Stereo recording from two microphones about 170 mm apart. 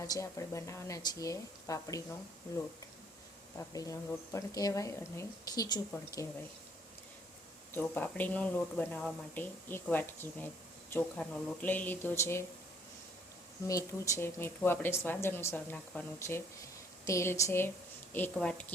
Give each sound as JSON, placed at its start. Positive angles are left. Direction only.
{"t": 0.0, "sound": "speech", "side_deg": 20}
{"t": 3.7, "sound": "speech", "side_deg": 20}
{"t": 7.7, "sound": "speech", "side_deg": 10}
{"t": 13.7, "sound": "speech", "side_deg": 20}